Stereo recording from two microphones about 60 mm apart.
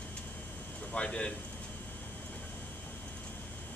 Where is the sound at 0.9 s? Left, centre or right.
Centre.